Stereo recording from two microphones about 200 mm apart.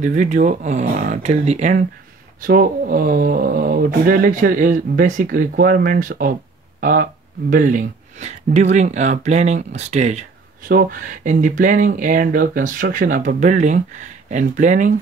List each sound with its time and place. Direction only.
0.0 s speech: 35° right (ahead or behind)
2.4 s speech: 45° right (ahead or behind)
10.7 s speech: 45° right (ahead or behind)